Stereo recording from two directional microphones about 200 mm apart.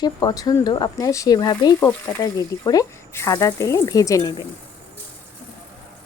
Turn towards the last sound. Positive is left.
turn(degrees=20)  # may be behind; listen again after turning